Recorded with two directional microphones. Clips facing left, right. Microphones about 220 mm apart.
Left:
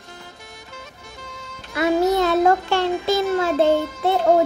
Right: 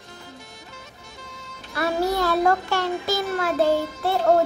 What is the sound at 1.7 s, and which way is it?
A child's voice, 20° left (ahead or behind).